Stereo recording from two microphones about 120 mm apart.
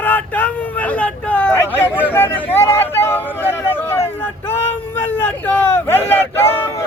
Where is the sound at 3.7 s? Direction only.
20° left (ahead or behind).